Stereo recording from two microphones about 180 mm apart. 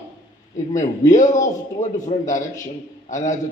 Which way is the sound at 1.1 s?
45° left (ahead or behind).